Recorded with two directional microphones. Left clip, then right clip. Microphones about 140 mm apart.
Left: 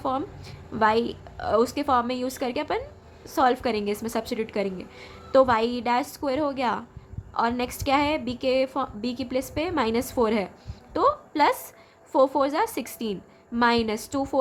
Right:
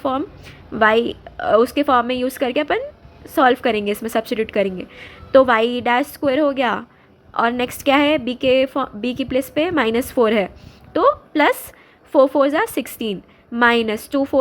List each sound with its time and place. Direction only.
0.0 s a woman's voice: 35° right (ahead or behind)